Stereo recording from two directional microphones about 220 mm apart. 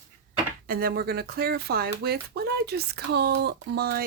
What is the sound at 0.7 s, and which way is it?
Speech, 40° right (ahead or behind).